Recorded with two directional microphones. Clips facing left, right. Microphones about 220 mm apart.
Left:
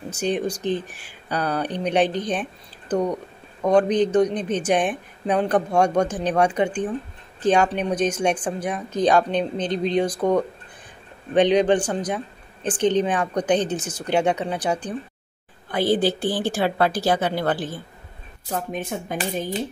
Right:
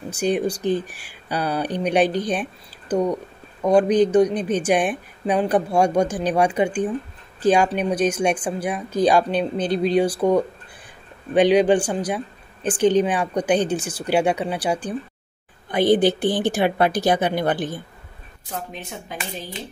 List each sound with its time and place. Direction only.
0.1 s a woman's voice: 10° right (ahead or behind)
3.7 s a woman's voice: 10° right (ahead or behind)
18.5 s speech: 50° left (ahead or behind)